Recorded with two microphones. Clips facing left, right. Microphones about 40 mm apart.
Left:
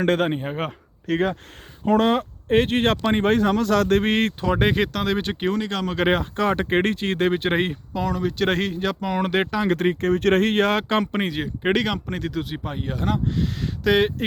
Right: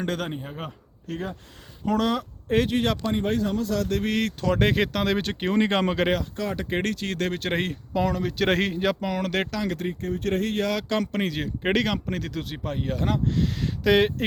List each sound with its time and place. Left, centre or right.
0.0 s speech: left
1.0 s speech: left
1.8 s speech: left
4.4 s speech: centre
4.7 s speech: centre
5.5 s speech: right
6.3 s speech: left
6.7 s speech: left
7.9 s speech: centre
9.0 s speech: centre
9.7 s speech: left
11.0 s speech: centre